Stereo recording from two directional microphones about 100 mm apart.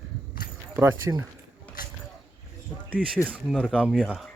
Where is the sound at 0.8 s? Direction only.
20° right (ahead or behind).